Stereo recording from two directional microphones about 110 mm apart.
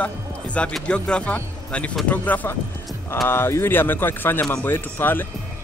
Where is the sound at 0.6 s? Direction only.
10° left (ahead or behind).